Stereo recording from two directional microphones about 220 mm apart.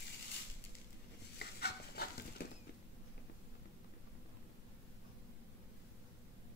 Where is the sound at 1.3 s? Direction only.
45° left (ahead or behind).